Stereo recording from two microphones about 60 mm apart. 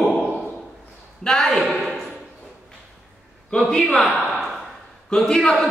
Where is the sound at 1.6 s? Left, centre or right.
Centre.